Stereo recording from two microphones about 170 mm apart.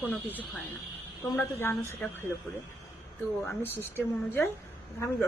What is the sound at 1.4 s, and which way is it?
Speech, 15° left (ahead or behind).